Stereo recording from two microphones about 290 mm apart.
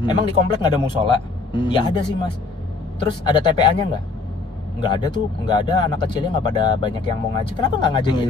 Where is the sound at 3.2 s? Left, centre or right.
Centre.